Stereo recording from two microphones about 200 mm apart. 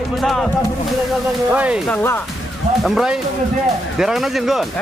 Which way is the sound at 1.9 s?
10° left (ahead or behind).